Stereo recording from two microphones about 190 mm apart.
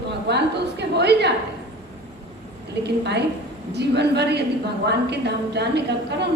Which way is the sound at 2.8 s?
60° right (ahead or behind).